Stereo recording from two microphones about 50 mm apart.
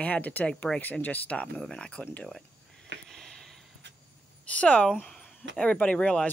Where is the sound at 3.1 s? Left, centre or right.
Centre.